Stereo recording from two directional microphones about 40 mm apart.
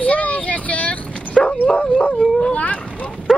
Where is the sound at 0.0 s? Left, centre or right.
Left.